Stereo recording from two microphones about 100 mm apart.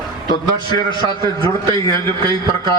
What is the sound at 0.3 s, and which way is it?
Speech, 45° left (ahead or behind).